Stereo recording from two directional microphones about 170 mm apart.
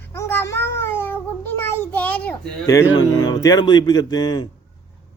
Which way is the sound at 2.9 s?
25° left (ahead or behind).